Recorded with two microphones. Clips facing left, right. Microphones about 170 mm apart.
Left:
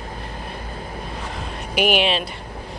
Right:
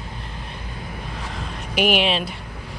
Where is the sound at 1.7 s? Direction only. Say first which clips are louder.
Left 1 dB; centre (ahead or behind).